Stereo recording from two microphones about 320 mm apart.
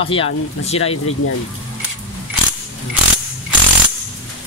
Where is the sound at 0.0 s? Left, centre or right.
Centre.